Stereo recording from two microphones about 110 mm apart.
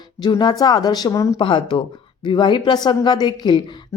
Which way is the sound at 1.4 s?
50° left (ahead or behind).